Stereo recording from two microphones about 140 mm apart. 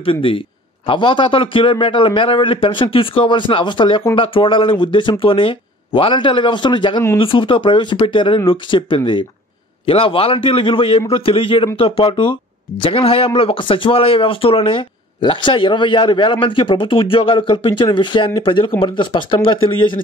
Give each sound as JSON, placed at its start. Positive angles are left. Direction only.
{"t": 0.0, "sound": "a man's voice", "side_deg": 40}